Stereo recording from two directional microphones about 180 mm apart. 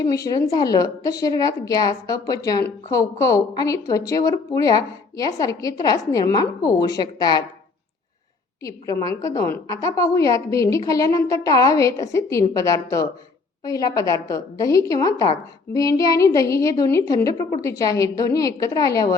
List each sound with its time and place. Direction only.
0.0 s a woman's voice: 20° left (ahead or behind)
8.6 s a woman's voice: 20° left (ahead or behind)